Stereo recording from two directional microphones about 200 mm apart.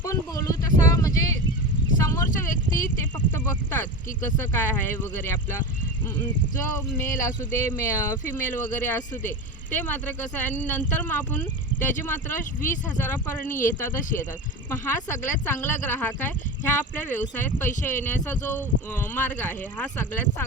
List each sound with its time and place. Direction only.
0.0 s a sound: 15° left (ahead or behind)
3.3 s speech: 10° left (ahead or behind)
6.7 s speech: 15° left (ahead or behind)